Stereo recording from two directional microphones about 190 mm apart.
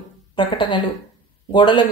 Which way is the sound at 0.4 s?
25° left (ahead or behind).